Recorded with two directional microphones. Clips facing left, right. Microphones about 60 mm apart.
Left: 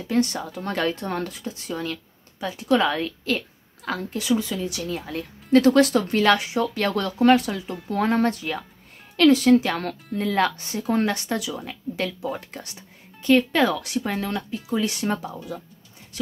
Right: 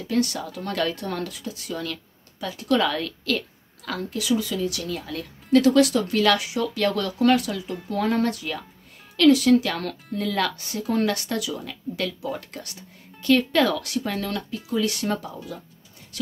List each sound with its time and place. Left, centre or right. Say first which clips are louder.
0.1 s a woman's voice: left 1 dB; left